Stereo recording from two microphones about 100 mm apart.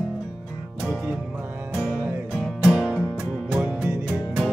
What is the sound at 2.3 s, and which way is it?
Music, 5° left (ahead or behind).